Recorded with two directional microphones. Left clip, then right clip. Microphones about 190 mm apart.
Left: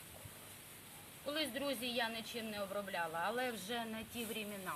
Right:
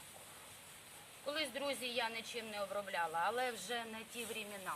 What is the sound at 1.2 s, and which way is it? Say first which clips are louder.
Speech: even; 15° right (ahead or behind).